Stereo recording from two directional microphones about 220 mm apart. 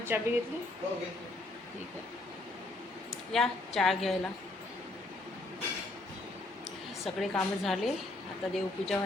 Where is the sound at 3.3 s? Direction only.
Centre (ahead or behind).